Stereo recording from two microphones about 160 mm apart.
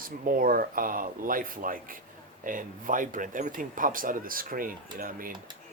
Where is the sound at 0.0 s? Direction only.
65° right (ahead or behind).